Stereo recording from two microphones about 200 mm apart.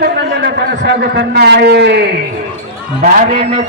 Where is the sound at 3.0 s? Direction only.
35° right (ahead or behind).